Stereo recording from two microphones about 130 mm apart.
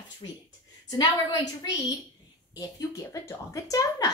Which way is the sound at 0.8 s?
30° left (ahead or behind).